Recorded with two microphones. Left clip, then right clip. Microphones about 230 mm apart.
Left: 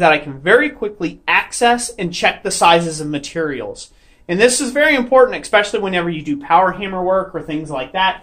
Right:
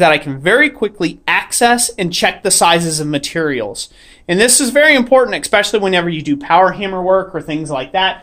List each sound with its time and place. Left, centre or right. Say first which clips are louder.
0.0 s speech: right 2 dB; right